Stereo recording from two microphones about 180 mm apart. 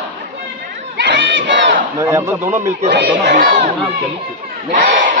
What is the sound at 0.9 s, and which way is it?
Crowd, 85° right.